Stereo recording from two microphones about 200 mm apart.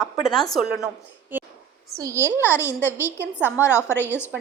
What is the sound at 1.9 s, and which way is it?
Speech, 15° right (ahead or behind).